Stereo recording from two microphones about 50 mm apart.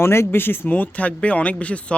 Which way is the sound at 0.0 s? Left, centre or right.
Left.